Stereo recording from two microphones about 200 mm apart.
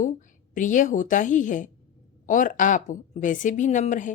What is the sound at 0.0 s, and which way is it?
A woman's voice, 40° left (ahead or behind).